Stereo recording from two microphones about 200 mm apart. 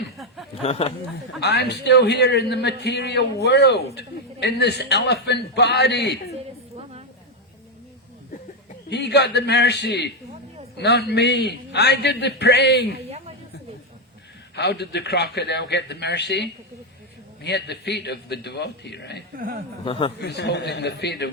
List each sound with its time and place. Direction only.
0.6 s speech: 30° left (ahead or behind)
1.4 s a man's voice: 55° left (ahead or behind)
8.9 s a man's voice: 55° left (ahead or behind)
13.1 s a sound: 30° right (ahead or behind)
14.5 s a man's voice: 55° left (ahead or behind)
19.4 s speech: 45° right (ahead or behind)
19.8 s speech: 25° left (ahead or behind)
20.2 s a man's voice: 55° left (ahead or behind)